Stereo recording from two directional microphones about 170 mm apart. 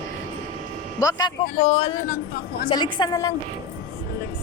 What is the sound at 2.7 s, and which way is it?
Speech, 25° left (ahead or behind).